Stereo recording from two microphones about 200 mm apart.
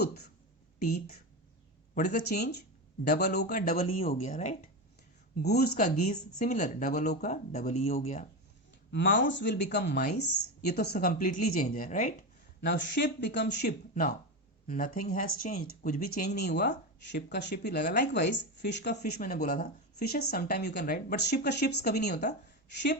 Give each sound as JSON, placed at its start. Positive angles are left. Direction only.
{"t": 2.0, "sound": "speech", "side_deg": 40}
{"t": 3.1, "sound": "speech", "side_deg": 55}
{"t": 3.4, "sound": "speech", "side_deg": 40}
{"t": 5.4, "sound": "speech", "side_deg": 55}
{"t": 5.8, "sound": "speech", "side_deg": 35}
{"t": 8.9, "sound": "speech", "side_deg": 60}
{"t": 12.6, "sound": "speech", "side_deg": 60}
{"t": 13.9, "sound": "speech", "side_deg": 40}